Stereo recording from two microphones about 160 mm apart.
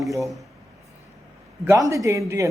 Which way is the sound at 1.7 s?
20° right (ahead or behind).